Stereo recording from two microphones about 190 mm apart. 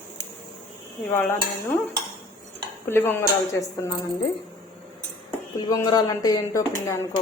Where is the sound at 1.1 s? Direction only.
10° left (ahead or behind).